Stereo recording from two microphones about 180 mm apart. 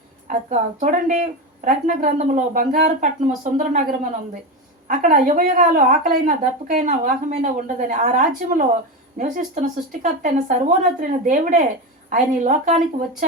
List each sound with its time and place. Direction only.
0.3 s speech: 45° right (ahead or behind)